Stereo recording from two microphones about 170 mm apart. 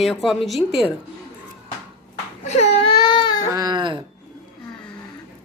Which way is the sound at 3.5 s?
25° right (ahead or behind).